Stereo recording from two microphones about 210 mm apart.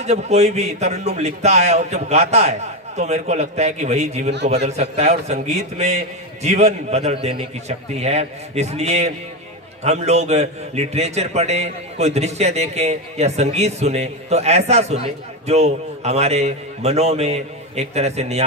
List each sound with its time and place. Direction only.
0.0 s a man's voice: 30° right (ahead or behind)